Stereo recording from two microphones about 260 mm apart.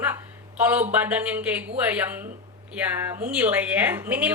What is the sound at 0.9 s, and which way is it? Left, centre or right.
A woman's voice, centre.